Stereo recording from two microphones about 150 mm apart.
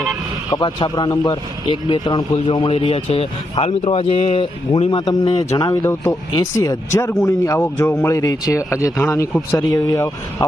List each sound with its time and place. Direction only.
0.5 s speech: 30° left (ahead or behind)